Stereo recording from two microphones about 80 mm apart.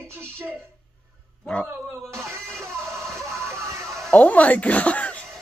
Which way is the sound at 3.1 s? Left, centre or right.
Right.